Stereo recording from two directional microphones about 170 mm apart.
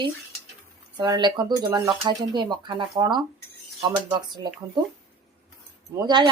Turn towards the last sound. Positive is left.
turn(degrees=-25)  # may be behind; listen again after turning